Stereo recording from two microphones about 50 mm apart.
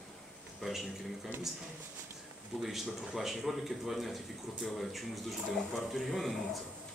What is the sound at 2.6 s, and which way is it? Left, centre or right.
Speech, centre.